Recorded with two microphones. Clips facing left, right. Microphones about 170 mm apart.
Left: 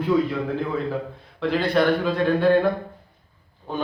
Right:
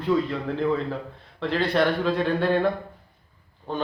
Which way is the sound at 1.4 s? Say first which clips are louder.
Left 2 dB; centre (ahead or behind).